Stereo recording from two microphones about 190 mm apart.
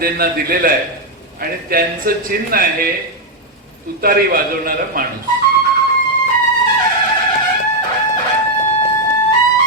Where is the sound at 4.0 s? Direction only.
50° right (ahead or behind).